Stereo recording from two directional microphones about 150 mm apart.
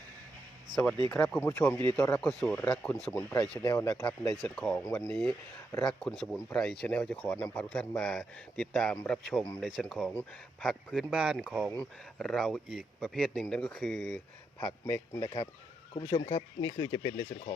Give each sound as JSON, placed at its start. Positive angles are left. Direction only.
{"t": 0.7, "sound": "speech", "side_deg": -30}
{"t": 1.1, "sound": "speech", "side_deg": 0}
{"t": 3.7, "sound": "speech", "side_deg": 20}
{"t": 4.0, "sound": "speech", "side_deg": 10}
{"t": 15.2, "sound": "speech", "side_deg": 35}
{"t": 16.6, "sound": "speech", "side_deg": 30}